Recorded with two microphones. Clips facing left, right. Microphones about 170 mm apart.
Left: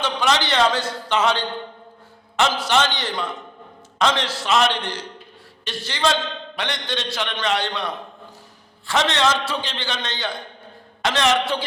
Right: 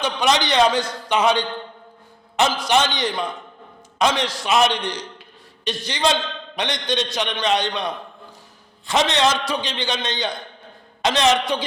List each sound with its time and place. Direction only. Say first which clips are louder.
0.0 s a man's voice: right 1 dB; 15° right (ahead or behind)
8.9 s a man's voice: right 1 dB; 15° right (ahead or behind)